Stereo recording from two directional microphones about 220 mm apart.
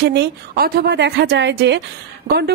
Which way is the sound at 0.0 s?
50° right (ahead or behind).